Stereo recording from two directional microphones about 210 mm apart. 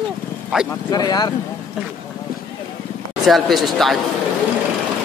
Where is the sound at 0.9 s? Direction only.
20° left (ahead or behind).